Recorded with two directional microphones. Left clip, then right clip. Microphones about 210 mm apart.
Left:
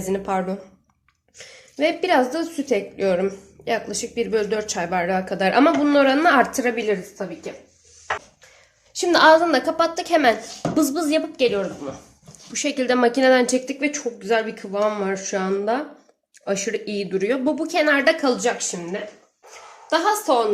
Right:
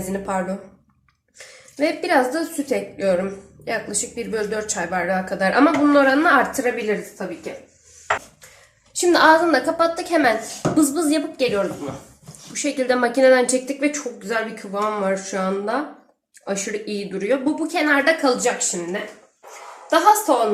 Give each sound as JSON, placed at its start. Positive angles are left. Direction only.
{"t": 0.1, "sound": "a woman's voice", "side_deg": 40}
{"t": 9.0, "sound": "a woman's voice", "side_deg": 40}
{"t": 20.3, "sound": "a woman's voice", "side_deg": 45}